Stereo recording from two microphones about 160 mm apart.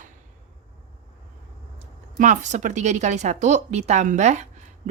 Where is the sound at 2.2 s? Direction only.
50° right (ahead or behind).